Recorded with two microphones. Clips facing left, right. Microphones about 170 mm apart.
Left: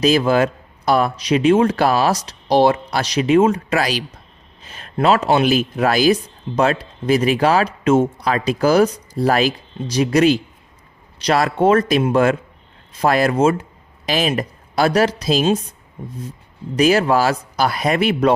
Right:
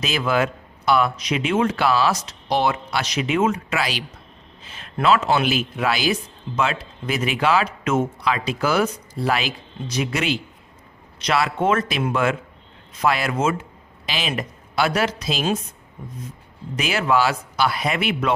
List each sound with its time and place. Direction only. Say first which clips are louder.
0.0 s speech: left 7 dB; 35° left (ahead or behind)
4.6 s a sound: left 3 dB; 40° left (ahead or behind)
5.0 s speech: left 4 dB; 40° left (ahead or behind)
16.7 s speech: left 6 dB; 40° left (ahead or behind)